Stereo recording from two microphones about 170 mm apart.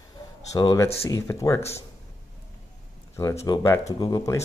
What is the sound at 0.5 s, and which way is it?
Speech, 25° left (ahead or behind).